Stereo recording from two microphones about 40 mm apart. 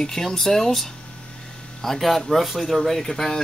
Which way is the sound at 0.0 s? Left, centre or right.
Centre.